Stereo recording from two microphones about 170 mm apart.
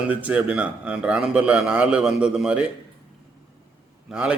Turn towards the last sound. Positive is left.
turn(degrees=-5)  # may be behind; listen again after turning